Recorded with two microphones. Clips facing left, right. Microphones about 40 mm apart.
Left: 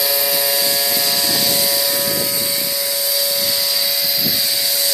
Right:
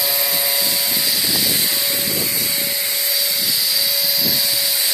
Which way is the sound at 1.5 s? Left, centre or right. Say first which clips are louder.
Left 3 dB; right.